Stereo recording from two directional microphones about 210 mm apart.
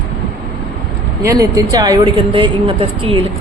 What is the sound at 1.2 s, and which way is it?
A woman's voice, 15° right (ahead or behind).